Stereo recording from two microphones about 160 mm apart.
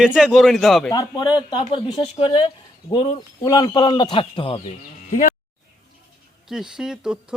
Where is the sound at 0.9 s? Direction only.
25° left (ahead or behind).